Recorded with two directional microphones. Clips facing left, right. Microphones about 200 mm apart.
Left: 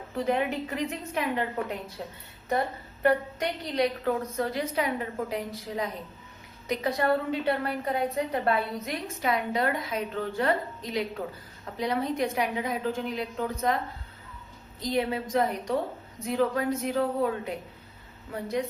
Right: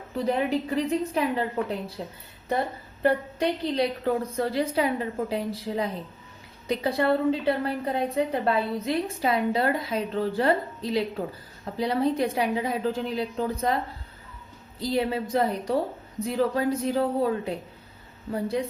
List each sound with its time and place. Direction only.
0.3 s a woman's voice: 35° right (ahead or behind)
3.0 s a woman's voice: 30° right (ahead or behind)
14.8 s a woman's voice: 30° right (ahead or behind)